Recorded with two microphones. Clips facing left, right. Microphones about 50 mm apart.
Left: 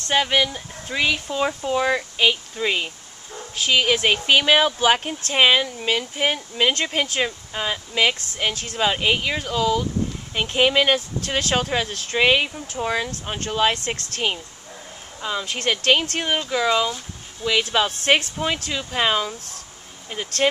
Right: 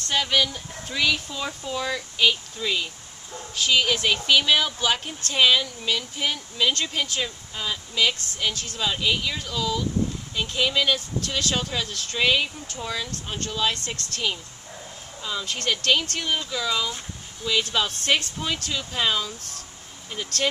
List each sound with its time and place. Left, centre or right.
0.1 s speech: left
17.4 s speech: left
17.7 s speech: left